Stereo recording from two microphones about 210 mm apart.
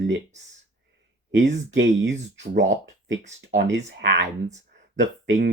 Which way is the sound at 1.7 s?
60° right (ahead or behind).